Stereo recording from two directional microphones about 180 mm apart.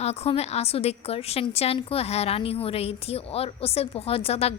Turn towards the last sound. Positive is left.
turn(degrees=35)  # may be behind; listen again after turning